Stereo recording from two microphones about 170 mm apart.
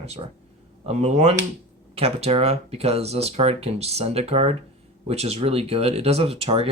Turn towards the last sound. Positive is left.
turn(degrees=-35)  # may be behind; listen again after turning